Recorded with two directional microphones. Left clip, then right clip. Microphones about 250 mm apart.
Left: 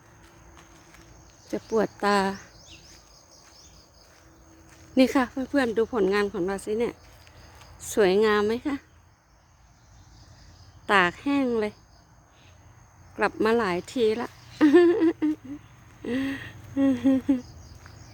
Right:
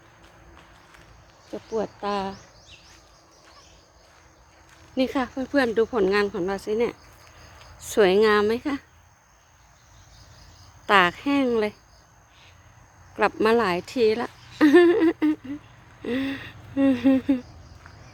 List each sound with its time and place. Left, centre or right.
1.5 s speech: left
4.9 s speech: left
5.2 s speech: centre
10.8 s speech: centre
13.1 s a sound: centre